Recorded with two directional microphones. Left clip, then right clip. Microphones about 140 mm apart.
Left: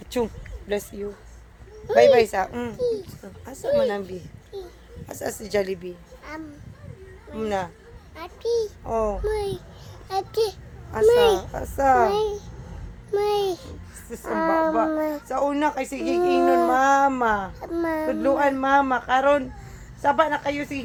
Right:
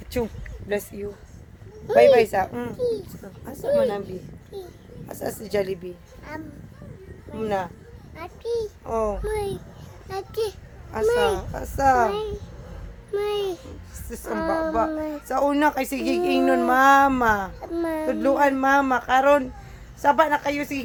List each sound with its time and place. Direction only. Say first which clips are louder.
0.7 s speech: even; centre (ahead or behind)
2.1 s speech: even; centre (ahead or behind)
4.5 s a sound: left 1 dB; 25° right (ahead or behind)
5.0 s a child's voice: even; 10° left (ahead or behind)
7.4 s a child's voice: right 1 dB; 10° left (ahead or behind)
9.2 s a child's voice: left 1 dB; centre (ahead or behind)
14.3 s speech: left 3 dB; 25° left (ahead or behind)
15.3 s speech: right 5 dB; 20° right (ahead or behind)
17.2 s speech: right 1 dB; 15° right (ahead or behind)
17.6 s a child's voice: left 1 dB; 10° left (ahead or behind)
18.0 s speech: right 2 dB; 15° right (ahead or behind)